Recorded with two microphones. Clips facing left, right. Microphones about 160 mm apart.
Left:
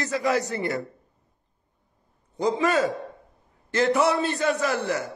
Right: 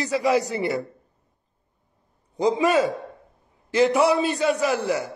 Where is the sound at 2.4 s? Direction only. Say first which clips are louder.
Right 3 dB; 15° right (ahead or behind).